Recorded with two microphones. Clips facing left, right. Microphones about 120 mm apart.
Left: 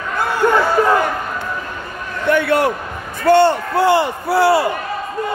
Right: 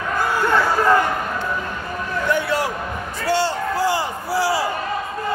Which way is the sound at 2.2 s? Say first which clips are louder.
Left 7 dB; 60° left (ahead or behind).